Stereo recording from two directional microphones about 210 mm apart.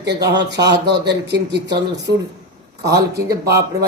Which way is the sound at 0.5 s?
55° right (ahead or behind).